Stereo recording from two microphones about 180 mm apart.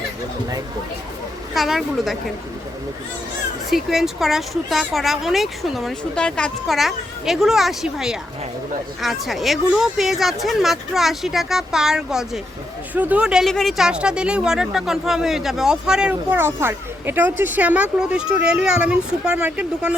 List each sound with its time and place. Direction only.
1.5 s speech: centre (ahead or behind)
3.7 s speech: centre (ahead or behind)